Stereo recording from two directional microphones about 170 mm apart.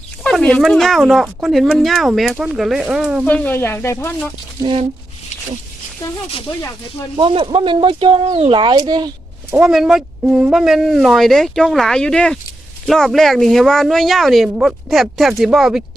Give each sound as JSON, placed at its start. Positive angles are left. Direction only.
{"t": 0.2, "sound": "speech", "side_deg": 5}
{"t": 3.2, "sound": "speech", "side_deg": 10}
{"t": 4.6, "sound": "speech", "side_deg": -35}
{"t": 7.2, "sound": "speech", "side_deg": -30}
{"t": 9.5, "sound": "speech", "side_deg": -5}